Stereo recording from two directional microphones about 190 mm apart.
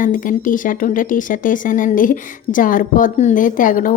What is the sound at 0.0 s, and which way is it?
Speech, 45° left (ahead or behind).